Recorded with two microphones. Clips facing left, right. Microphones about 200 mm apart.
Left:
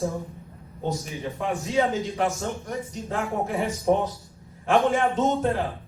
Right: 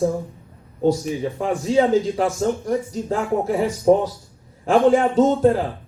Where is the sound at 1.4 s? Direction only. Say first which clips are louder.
Right 5 dB; 30° right (ahead or behind).